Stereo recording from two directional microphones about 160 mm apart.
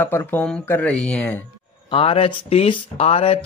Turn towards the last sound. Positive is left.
turn(degrees=40)  # may be behind; listen again after turning